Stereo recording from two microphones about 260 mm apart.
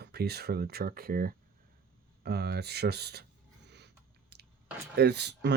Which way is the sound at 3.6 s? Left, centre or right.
Right.